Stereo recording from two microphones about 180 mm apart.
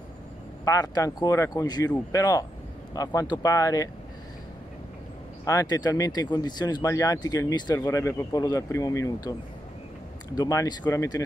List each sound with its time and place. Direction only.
0.7 s speech: 20° left (ahead or behind)
5.4 s speech: 20° left (ahead or behind)
10.3 s speech: 20° left (ahead or behind)